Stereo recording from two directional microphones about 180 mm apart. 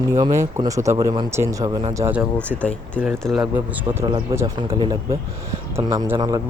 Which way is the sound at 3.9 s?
20° right (ahead or behind).